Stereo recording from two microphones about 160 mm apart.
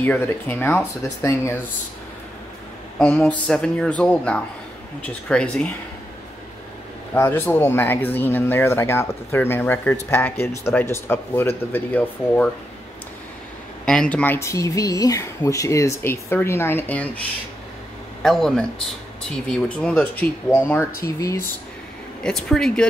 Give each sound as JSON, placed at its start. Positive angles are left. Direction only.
{"t": 0.0, "sound": "speech", "side_deg": 10}
{"t": 3.0, "sound": "speech", "side_deg": 5}
{"t": 7.2, "sound": "speech", "side_deg": 10}
{"t": 13.8, "sound": "speech", "side_deg": 5}
{"t": 18.2, "sound": "speech", "side_deg": 0}
{"t": 22.2, "sound": "speech", "side_deg": 5}